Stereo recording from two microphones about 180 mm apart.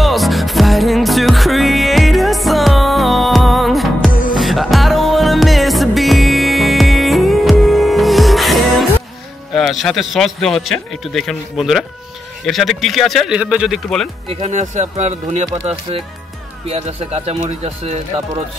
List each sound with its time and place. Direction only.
0.0 s music: centre (ahead or behind)
4.1 s music: 50° left (ahead or behind)
4.4 s music: centre (ahead or behind)
9.5 s a man's voice: centre (ahead or behind)
14.2 s speech: 35° right (ahead or behind)